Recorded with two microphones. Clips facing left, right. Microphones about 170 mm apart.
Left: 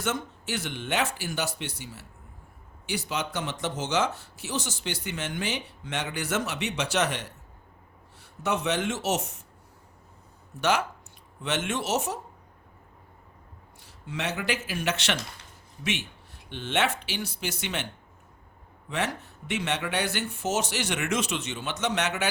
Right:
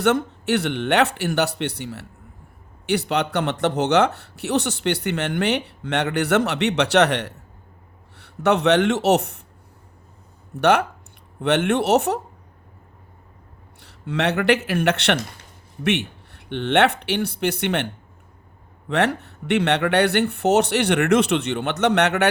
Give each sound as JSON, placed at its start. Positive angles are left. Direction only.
{"t": 0.0, "sound": "speech", "side_deg": -65}
{"t": 10.6, "sound": "speech", "side_deg": -60}
{"t": 13.7, "sound": "speech", "side_deg": -65}
{"t": 18.9, "sound": "speech", "side_deg": -65}